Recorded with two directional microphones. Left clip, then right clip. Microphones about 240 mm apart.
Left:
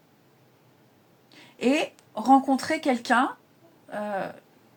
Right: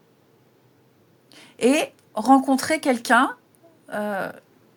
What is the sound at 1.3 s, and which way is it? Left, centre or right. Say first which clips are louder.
A woman's voice: right 5 dB; right.